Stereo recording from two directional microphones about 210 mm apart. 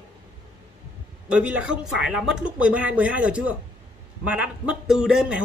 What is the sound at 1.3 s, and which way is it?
A woman's voice, 5° right (ahead or behind).